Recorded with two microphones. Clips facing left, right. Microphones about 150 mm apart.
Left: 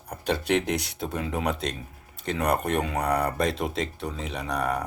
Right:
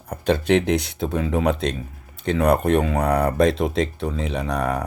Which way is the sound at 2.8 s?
60° right (ahead or behind).